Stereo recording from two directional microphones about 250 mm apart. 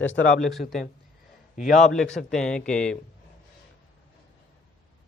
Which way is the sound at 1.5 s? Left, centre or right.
Left.